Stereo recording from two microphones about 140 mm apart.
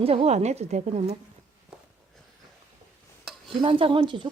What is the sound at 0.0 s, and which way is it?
A woman's voice, 45° right (ahead or behind).